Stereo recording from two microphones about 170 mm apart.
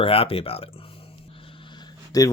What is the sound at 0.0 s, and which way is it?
Speech, 35° left (ahead or behind).